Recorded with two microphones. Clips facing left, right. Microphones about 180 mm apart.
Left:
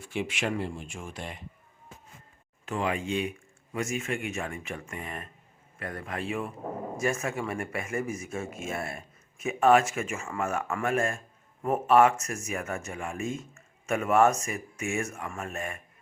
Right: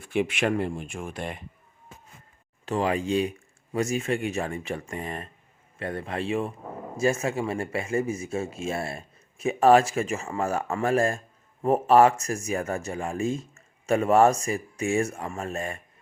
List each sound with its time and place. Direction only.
0.0 s speech: 55° right (ahead or behind)
2.6 s a man's voice: 35° right (ahead or behind)